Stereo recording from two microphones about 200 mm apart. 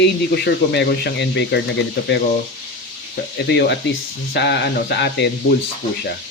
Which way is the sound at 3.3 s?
60° left (ahead or behind).